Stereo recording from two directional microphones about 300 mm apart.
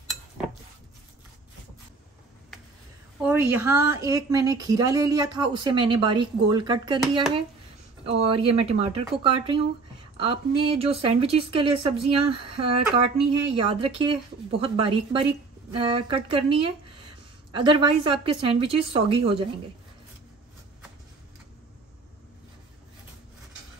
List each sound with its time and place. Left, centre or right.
3.2 s a woman's voice: centre